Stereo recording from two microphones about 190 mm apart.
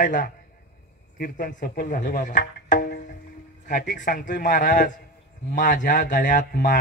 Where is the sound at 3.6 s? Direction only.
45° left (ahead or behind).